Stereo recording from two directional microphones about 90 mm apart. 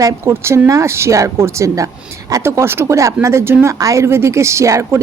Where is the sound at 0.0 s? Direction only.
35° right (ahead or behind).